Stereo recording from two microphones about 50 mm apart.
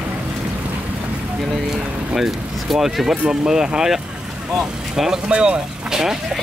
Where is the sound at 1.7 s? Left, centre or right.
Centre.